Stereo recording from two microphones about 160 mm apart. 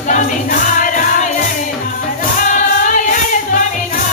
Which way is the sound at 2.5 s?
50° left (ahead or behind).